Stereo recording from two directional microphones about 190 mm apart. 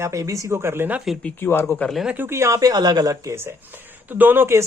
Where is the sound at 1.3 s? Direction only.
10° left (ahead or behind).